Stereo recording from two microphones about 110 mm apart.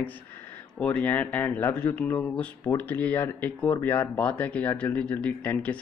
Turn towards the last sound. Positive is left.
turn(degrees=15)  # may be behind; listen again after turning